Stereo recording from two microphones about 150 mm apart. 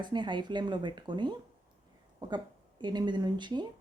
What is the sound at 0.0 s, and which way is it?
Speech, 30° right (ahead or behind).